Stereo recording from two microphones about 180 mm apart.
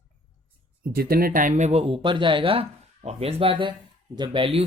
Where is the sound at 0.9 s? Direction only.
55° right (ahead or behind).